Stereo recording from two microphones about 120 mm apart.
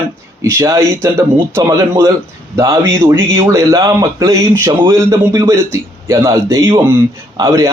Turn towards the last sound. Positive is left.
turn(degrees=-30)  # may be behind; listen again after turning